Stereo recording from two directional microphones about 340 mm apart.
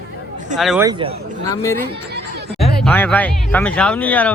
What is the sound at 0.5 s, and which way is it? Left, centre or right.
Speech, centre.